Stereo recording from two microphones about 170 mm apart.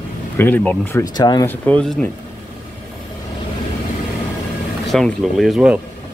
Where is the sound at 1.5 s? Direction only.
10° left (ahead or behind).